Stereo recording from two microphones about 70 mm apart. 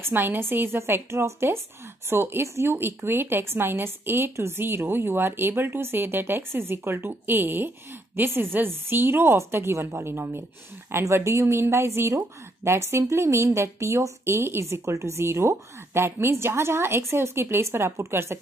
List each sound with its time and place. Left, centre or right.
0.0 s a woman's voice: right